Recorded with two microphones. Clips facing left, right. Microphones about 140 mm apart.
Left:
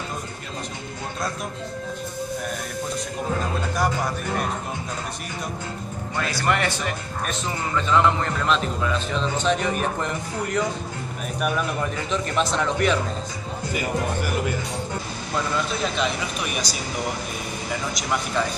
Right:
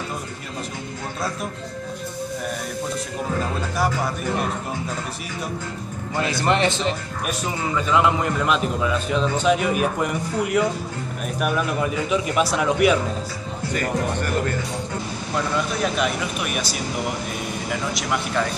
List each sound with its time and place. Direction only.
3.7 s music: 5° right (ahead or behind)
6.1 s speech: 25° right (ahead or behind)
7.2 s a man's voice: 10° right (ahead or behind)
13.7 s speech: 10° left (ahead or behind)
15.3 s speech: 5° right (ahead or behind)
17.9 s speech: centre (ahead or behind)